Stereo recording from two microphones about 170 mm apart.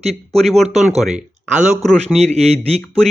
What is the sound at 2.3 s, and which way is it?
Speech, 35° right (ahead or behind).